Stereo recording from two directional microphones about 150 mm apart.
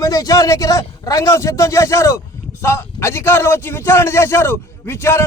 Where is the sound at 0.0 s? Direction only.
25° left (ahead or behind).